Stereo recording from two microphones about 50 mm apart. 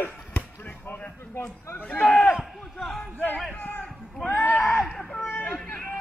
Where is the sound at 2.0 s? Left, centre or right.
Left.